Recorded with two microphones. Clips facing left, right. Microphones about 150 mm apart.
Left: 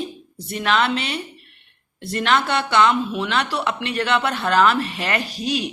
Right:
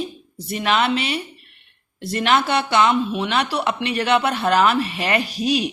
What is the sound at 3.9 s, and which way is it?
Speech, 15° right (ahead or behind).